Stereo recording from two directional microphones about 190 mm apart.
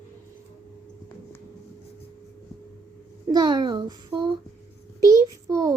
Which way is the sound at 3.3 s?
20° right (ahead or behind).